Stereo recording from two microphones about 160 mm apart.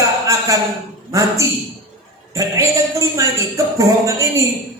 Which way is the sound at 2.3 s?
20° right (ahead or behind).